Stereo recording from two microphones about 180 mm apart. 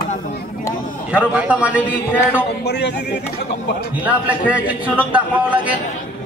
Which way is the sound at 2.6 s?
70° left (ahead or behind).